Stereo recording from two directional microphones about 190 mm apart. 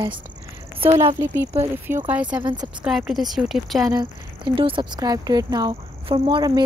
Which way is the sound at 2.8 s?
Centre (ahead or behind).